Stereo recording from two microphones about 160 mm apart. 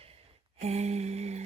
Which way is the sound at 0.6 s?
40° right (ahead or behind).